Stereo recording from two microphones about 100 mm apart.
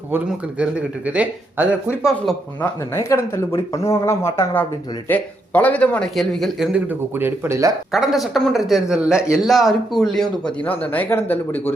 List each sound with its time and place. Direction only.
0.3 s speech: 10° right (ahead or behind)
2.0 s a man's voice: centre (ahead or behind)
2.6 s speech: 30° left (ahead or behind)
5.0 s speech: 15° left (ahead or behind)
6.1 s a man's voice: centre (ahead or behind)
6.7 s speech: 20° right (ahead or behind)
7.9 s a man's voice: centre (ahead or behind)
10.7 s speech: 15° left (ahead or behind)